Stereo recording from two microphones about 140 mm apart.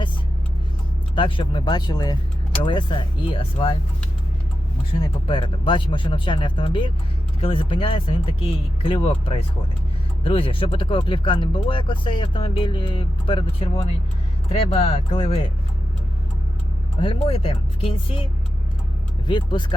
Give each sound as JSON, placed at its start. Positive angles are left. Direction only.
{"t": 1.1, "sound": "speech", "side_deg": 35}
{"t": 5.3, "sound": "speech", "side_deg": 35}
{"t": 17.0, "sound": "speech", "side_deg": 40}
{"t": 19.3, "sound": "speech", "side_deg": 35}